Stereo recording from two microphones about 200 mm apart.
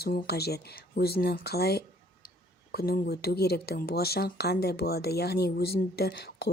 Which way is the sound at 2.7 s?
50° left (ahead or behind).